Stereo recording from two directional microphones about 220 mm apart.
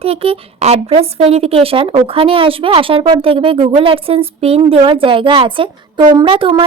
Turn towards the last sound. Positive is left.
turn(degrees=-25)  # may be behind; listen again after turning